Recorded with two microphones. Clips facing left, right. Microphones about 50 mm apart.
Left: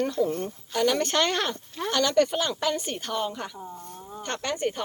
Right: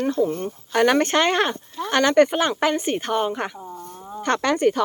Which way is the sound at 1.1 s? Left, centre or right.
Right.